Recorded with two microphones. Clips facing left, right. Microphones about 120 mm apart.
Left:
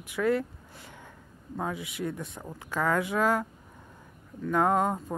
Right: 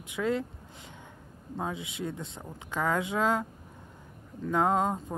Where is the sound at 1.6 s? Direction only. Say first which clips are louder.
Left 2 dB; 25° right (ahead or behind).